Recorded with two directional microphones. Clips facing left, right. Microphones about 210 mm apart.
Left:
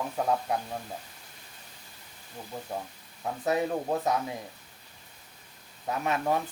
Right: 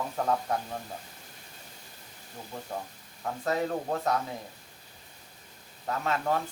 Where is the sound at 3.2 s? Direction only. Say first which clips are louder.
Left 2 dB; 15° left (ahead or behind).